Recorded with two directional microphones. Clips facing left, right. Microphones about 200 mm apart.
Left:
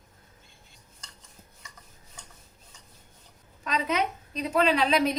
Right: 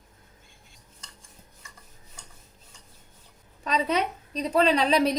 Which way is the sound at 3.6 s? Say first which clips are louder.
Right 2 dB; 35° right (ahead or behind).